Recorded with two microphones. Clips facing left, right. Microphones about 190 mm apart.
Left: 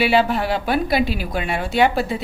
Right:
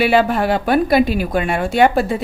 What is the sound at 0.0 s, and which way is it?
Speech, 50° right (ahead or behind).